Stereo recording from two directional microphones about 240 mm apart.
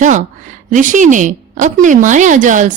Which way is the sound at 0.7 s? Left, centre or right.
Right.